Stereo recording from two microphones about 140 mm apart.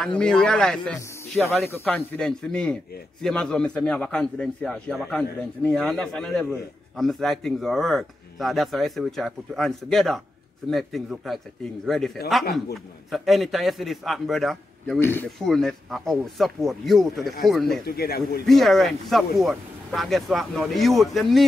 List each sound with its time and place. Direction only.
0.2 s a man's voice: 5° left (ahead or behind)
15.0 s speech: 15° left (ahead or behind)
15.3 s a man's voice: centre (ahead or behind)
17.8 s a man's voice: 90° left
18.5 s a man's voice: centre (ahead or behind)